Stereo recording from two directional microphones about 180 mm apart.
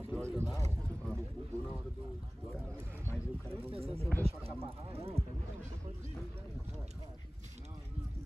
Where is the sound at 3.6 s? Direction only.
35° right (ahead or behind).